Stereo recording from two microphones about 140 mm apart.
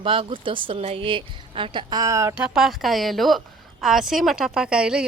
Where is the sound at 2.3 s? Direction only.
5° right (ahead or behind).